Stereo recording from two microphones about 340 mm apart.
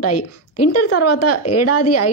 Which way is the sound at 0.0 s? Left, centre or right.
Left.